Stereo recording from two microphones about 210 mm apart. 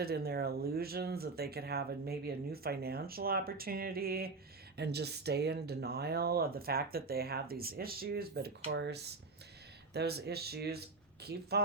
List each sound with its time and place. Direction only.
0.0 s speech: 50° right (ahead or behind)